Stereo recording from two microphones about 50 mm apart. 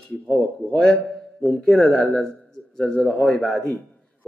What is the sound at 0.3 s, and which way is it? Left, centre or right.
Speech, centre.